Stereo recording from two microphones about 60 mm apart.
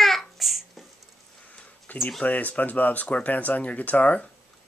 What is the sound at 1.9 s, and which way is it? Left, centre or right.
Speech, left.